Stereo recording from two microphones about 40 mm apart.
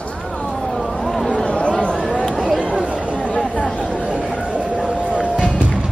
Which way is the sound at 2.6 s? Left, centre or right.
Right.